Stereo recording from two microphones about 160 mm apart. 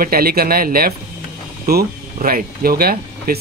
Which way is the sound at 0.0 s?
70° right (ahead or behind).